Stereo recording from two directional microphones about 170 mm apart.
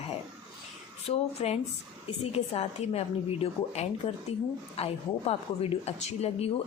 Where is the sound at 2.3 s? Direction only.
35° left (ahead or behind).